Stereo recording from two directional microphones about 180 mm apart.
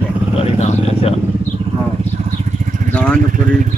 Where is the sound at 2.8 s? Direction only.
45° right (ahead or behind).